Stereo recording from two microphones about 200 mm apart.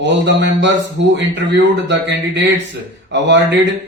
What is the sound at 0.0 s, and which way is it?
Speech, 65° right (ahead or behind).